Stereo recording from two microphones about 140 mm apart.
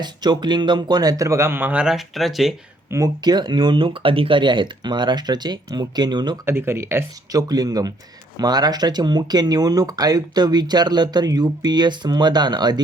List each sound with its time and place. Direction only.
0.0 s speech: 30° right (ahead or behind); by 2.6 s centre (ahead or behind)
2.9 s speech: 25° right (ahead or behind)
6.4 s speech: 15° right (ahead or behind)